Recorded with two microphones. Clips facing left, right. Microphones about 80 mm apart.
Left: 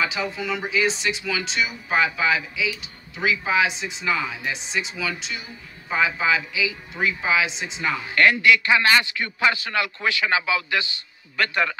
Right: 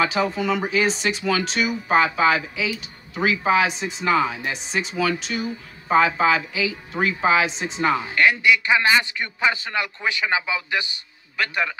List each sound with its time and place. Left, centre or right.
0.0 s speech: right
8.1 s a man's voice: centre
11.3 s a man's voice: centre